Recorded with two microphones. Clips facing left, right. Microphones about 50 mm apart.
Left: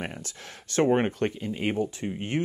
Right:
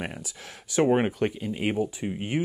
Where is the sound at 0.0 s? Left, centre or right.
Centre.